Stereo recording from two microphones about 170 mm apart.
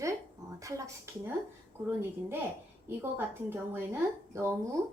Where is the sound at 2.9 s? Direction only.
10° right (ahead or behind).